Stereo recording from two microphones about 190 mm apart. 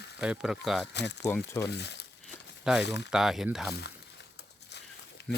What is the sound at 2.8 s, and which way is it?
Speech, 65° left (ahead or behind).